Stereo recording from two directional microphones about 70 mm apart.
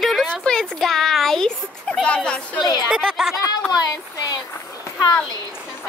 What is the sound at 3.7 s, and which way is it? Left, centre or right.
Speech, left.